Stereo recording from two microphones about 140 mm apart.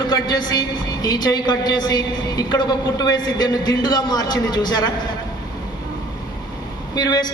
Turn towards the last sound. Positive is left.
turn(degrees=30)  # may be behind; listen again after turning